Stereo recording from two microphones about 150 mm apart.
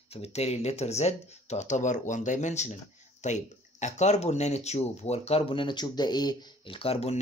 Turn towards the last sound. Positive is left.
turn(degrees=40)  # may be behind; listen again after turning